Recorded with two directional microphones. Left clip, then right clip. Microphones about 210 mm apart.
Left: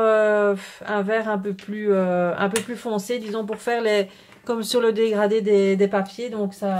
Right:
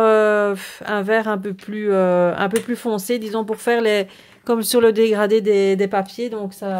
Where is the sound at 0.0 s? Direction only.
45° right (ahead or behind).